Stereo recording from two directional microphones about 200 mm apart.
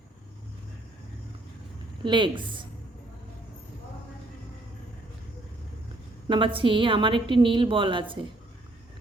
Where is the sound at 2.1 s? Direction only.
25° right (ahead or behind).